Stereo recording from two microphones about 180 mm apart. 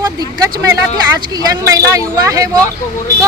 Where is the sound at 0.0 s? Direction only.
20° right (ahead or behind).